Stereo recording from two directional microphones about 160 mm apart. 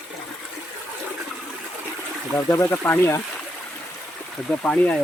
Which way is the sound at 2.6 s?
15° left (ahead or behind).